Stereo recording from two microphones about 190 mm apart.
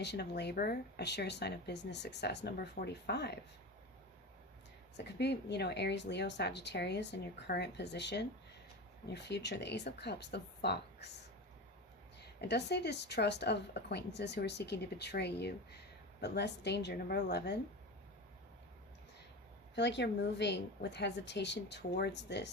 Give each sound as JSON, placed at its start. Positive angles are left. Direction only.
{"t": 0.0, "sound": "speech", "side_deg": 60}
{"t": 4.9, "sound": "speech", "side_deg": 65}
{"t": 12.4, "sound": "speech", "side_deg": 60}
{"t": 19.7, "sound": "speech", "side_deg": 65}